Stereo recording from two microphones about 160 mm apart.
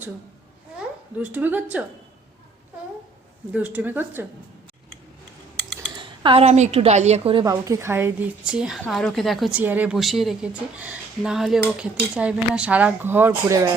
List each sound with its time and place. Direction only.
0.8 s speech: 10° right (ahead or behind)
3.5 s speech: 10° right (ahead or behind)
5.5 s a sound: 10° left (ahead or behind)
6.0 s a woman's voice: 35° right (ahead or behind)
7.4 s a woman's voice: 20° right (ahead or behind)